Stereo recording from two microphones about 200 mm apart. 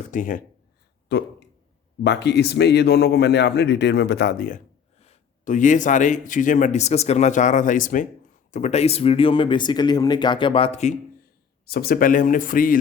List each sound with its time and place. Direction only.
0.1 s speech: 40° left (ahead or behind)
1.1 s speech: 60° left (ahead or behind); by 10.9 s 35° left (ahead or behind)
11.6 s speech: 50° left (ahead or behind)